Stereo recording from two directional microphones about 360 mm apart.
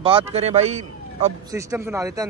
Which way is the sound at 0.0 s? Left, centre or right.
Centre.